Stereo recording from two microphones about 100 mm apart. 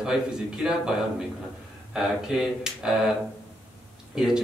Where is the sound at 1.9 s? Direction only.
5° right (ahead or behind).